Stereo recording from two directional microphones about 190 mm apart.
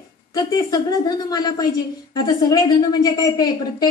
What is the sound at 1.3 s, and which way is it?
A woman's voice, 20° left (ahead or behind).